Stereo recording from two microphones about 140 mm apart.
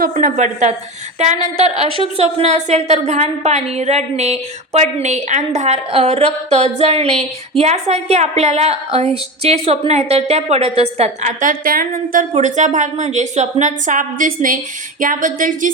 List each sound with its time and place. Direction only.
0.0 s a woman's voice: 70° right (ahead or behind); by 11.1 s 50° right (ahead or behind)
11.3 s a woman's voice: 80° right
12.4 s a woman's voice: 60° right (ahead or behind)
15.0 s a sound: 75° right (ahead or behind)